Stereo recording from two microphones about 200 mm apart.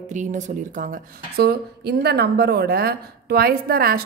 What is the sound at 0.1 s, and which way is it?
A woman's voice, 40° right (ahead or behind).